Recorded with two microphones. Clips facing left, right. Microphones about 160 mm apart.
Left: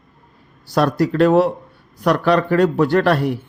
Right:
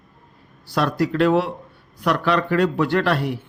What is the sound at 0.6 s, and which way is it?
A man's voice, 40° left (ahead or behind).